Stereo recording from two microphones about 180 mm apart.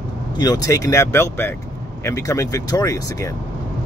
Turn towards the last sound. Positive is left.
turn(degrees=20)  # may be behind; listen again after turning